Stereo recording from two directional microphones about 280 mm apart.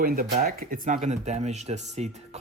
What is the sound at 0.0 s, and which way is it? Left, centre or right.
Speech, right.